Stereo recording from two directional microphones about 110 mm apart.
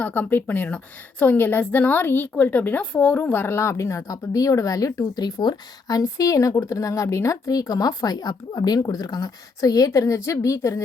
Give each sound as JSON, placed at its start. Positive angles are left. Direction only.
{"t": 0.0, "sound": "a woman's voice", "side_deg": 15}
{"t": 5.2, "sound": "a woman's voice", "side_deg": 40}